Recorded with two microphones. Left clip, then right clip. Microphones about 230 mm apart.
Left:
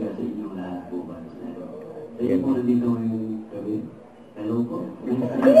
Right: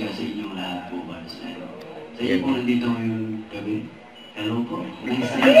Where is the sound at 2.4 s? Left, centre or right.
Centre.